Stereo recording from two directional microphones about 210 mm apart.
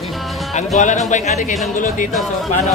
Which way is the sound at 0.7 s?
35° left (ahead or behind).